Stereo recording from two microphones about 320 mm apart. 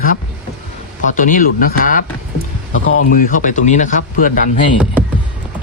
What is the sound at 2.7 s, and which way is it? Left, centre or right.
Speech, left.